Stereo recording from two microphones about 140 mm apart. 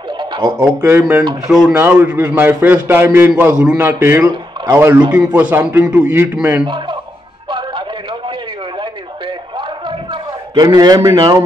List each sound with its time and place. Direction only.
0.5 s a man's voice: 15° right (ahead or behind)
1.5 s speech: centre (ahead or behind)
1.8 s a man's voice: 15° right (ahead or behind)
6.6 s speech: 35° right (ahead or behind)
10.5 s a man's voice: 30° right (ahead or behind)